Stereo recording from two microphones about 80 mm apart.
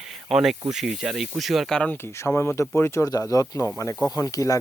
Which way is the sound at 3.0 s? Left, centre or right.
Left.